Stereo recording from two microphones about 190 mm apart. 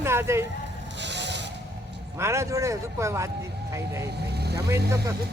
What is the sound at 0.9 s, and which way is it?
Zipper, 65° right (ahead or behind).